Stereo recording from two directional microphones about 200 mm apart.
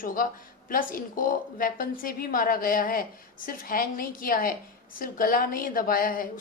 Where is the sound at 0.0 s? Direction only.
45° left (ahead or behind).